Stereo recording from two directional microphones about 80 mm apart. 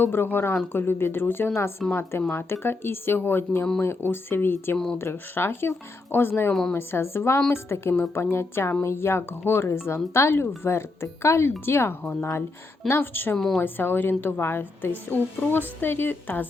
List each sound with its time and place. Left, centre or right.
0.0 s a woman's voice: left
6.5 s a woman's voice: centre
6.7 s a woman's voice: left
13.3 s a woman's voice: centre
13.6 s a woman's voice: left